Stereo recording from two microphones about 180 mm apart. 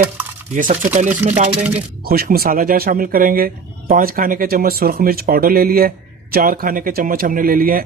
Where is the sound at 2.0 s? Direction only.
55° right (ahead or behind).